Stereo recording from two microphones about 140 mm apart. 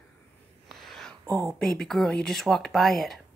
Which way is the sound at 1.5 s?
5° left (ahead or behind).